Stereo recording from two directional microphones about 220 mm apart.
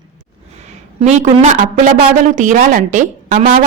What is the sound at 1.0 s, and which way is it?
A woman's voice, 35° right (ahead or behind).